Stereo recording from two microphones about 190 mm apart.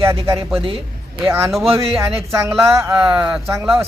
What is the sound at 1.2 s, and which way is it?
Speech, 10° right (ahead or behind).